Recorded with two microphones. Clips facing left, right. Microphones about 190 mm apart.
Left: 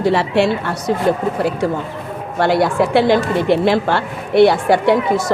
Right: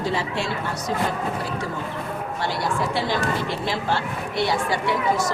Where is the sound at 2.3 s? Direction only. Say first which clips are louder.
Left 12 dB; 65° left (ahead or behind).